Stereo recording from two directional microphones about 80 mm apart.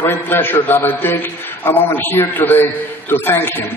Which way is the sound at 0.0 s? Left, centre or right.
Left.